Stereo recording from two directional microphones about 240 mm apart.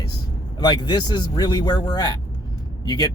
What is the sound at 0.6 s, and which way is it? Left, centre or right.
Speech, centre.